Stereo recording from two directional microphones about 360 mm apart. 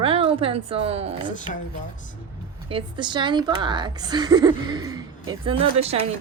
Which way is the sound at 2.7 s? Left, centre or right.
Centre.